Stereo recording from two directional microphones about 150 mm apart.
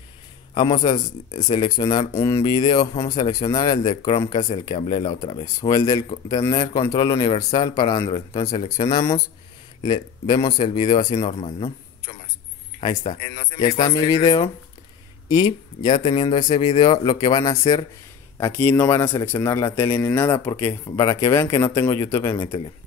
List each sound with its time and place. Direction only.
0.6 s speech: 30° left (ahead or behind)
5.4 s speech: 25° left (ahead or behind)
12.8 s a man's voice: 30° left (ahead or behind)